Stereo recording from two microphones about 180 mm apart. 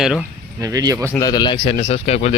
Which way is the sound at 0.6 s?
20° right (ahead or behind).